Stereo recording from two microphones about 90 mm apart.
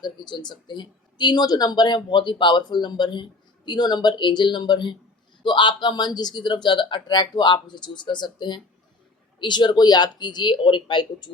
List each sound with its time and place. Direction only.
0.0 s speech: 55° left (ahead or behind)